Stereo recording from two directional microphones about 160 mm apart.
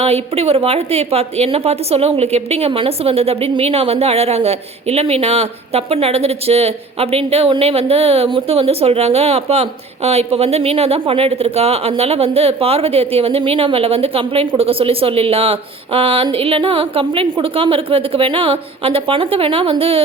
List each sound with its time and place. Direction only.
0.0 s a woman's voice: 40° right (ahead or behind)